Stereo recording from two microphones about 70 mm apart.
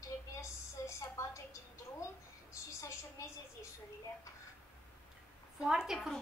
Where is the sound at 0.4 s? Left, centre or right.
Left.